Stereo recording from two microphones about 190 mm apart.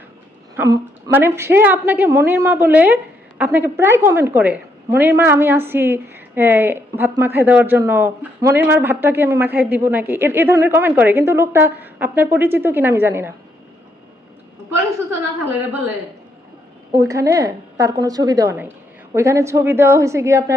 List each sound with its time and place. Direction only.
0.5 s a woman's voice: 15° right (ahead or behind)
16.9 s a woman's voice: 15° right (ahead or behind)